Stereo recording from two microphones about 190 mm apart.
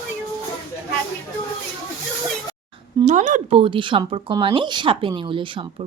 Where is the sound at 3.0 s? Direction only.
40° right (ahead or behind).